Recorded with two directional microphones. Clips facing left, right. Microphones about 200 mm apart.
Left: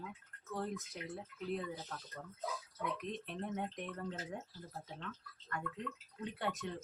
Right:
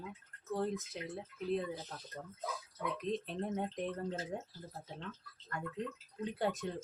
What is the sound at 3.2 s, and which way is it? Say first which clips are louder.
Speech: right 3 dB; 30° right (ahead or behind).